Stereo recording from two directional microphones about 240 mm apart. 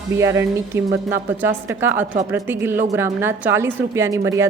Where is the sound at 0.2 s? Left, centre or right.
Centre.